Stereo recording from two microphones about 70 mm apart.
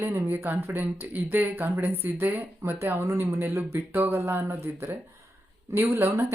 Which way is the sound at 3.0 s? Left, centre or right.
Right.